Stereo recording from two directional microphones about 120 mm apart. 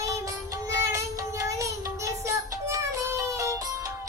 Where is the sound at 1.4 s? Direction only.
25° right (ahead or behind).